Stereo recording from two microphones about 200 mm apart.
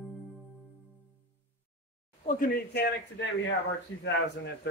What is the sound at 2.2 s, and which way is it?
Speech, 40° left (ahead or behind).